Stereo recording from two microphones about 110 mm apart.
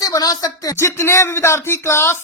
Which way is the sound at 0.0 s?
35° left (ahead or behind).